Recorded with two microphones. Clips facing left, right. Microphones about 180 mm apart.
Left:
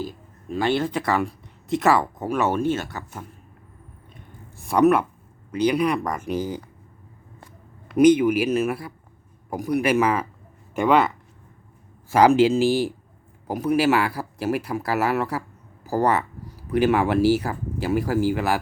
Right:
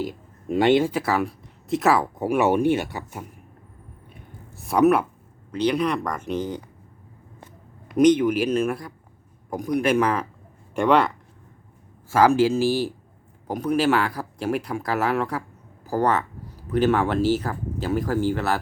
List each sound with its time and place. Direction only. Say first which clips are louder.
0.1 s a sound: right 5 dB; 20° right (ahead or behind)
0.9 s speech: even; 5° right (ahead or behind)
2.2 s speech: right 7 dB; 15° right (ahead or behind)
4.1 s a sound: even; centre (ahead or behind)
5.5 s speech: left 2 dB; 10° left (ahead or behind)
7.9 s speech: left 1 dB; 5° left (ahead or behind)
12.0 s speech: left 2 dB; 15° left (ahead or behind)